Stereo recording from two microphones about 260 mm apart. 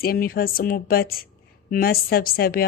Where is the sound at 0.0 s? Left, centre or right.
Left.